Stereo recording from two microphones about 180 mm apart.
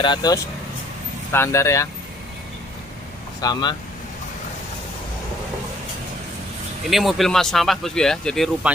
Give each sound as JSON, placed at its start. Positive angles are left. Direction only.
{"t": 0.0, "sound": "speech", "side_deg": 25}
{"t": 3.3, "sound": "speech", "side_deg": 20}
{"t": 6.9, "sound": "speech", "side_deg": 0}